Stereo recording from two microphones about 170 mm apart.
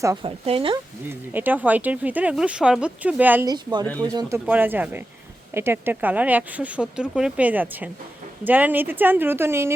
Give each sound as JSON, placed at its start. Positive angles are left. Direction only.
{"t": 0.2, "sound": "speech", "side_deg": -30}
{"t": 1.3, "sound": "speech", "side_deg": -10}
{"t": 3.4, "sound": "speech", "side_deg": -25}
{"t": 4.4, "sound": "speech", "side_deg": -10}